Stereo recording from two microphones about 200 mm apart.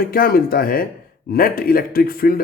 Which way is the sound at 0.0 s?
50° left (ahead or behind).